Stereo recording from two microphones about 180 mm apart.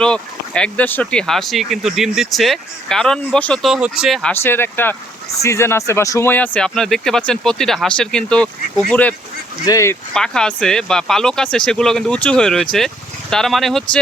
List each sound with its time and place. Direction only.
0.0 s speech: 5° left (ahead or behind)
10.2 s speech: 5° left (ahead or behind)